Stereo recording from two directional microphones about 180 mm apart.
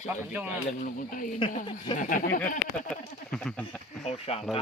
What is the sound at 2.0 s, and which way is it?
Speech, 45° left (ahead or behind).